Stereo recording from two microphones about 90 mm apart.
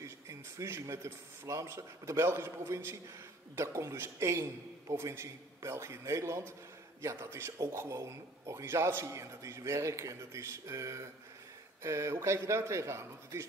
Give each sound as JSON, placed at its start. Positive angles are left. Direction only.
{"t": 0.0, "sound": "a man's voice", "side_deg": -35}